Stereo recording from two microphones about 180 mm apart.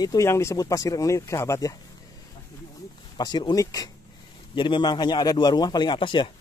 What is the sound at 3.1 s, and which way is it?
Speech, 25° left (ahead or behind).